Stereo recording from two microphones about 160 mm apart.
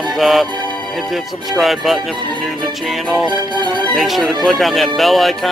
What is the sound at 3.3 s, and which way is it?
Music, 30° right (ahead or behind).